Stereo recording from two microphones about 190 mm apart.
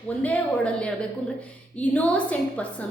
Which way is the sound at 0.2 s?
5° left (ahead or behind).